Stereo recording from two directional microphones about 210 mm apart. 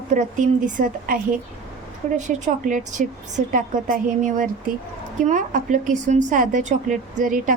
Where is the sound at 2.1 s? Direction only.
35° right (ahead or behind).